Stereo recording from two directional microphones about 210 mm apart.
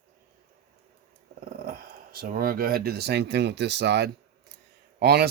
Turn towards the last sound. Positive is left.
turn(degrees=-50)  # may be behind; listen again after turning